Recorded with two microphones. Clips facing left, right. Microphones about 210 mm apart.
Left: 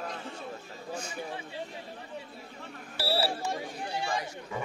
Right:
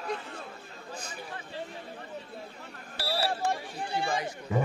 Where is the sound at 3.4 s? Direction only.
55° right (ahead or behind).